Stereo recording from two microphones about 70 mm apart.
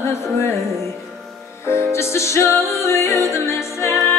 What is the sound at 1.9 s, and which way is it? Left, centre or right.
Music, left.